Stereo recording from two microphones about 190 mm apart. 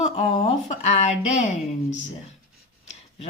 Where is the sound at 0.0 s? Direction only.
35° left (ahead or behind).